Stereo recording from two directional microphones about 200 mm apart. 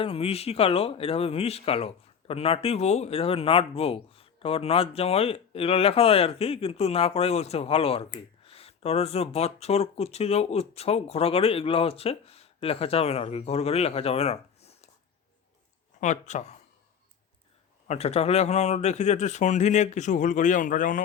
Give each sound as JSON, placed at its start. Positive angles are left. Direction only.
{"t": 0.0, "sound": "speech", "side_deg": 30}
{"t": 16.0, "sound": "speech", "side_deg": 35}
{"t": 17.8, "sound": "speech", "side_deg": 30}